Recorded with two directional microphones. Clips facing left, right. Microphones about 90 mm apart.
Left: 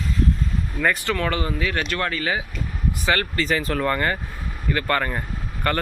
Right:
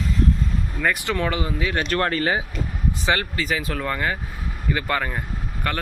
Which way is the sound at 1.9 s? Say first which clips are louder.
Right 3 dB; 35° right (ahead or behind).